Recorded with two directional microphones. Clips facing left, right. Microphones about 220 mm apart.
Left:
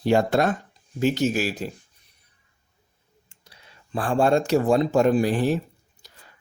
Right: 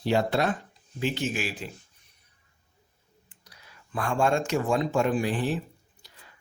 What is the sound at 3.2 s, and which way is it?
Speech, 25° left (ahead or behind).